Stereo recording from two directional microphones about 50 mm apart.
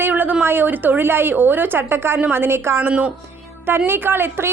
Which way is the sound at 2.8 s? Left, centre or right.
Right.